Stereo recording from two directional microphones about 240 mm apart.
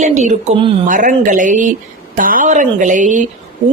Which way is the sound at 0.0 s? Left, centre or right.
Right.